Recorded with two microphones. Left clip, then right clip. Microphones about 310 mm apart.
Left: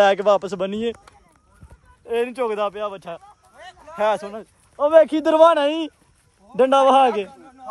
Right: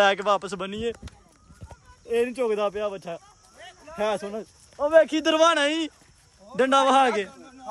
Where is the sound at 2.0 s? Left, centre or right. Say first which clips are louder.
Left 2 dB; centre.